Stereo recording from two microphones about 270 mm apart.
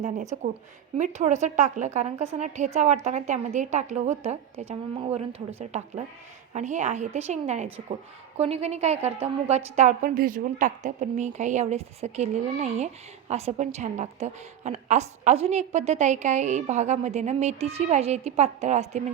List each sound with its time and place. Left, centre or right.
0.9 s a woman's voice: right
6.5 s a woman's voice: right